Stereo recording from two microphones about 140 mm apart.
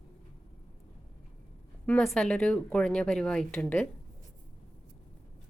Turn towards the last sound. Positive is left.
turn(degrees=10)  # may be behind; listen again after turning